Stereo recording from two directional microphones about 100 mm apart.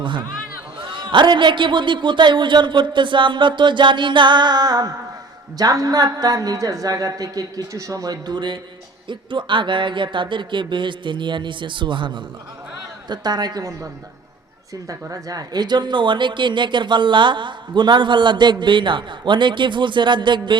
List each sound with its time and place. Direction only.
0.0 s a man's voice: 55° right (ahead or behind)
14.8 s a man's voice: 35° right (ahead or behind); by 20.6 s 50° right (ahead or behind)